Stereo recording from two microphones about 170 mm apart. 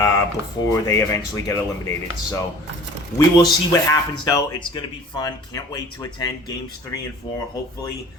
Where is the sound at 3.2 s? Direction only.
20° left (ahead or behind).